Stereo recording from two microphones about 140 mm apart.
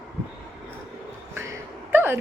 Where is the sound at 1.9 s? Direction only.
15° right (ahead or behind).